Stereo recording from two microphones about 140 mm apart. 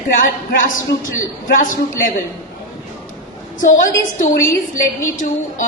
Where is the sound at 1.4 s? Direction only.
75° left (ahead or behind).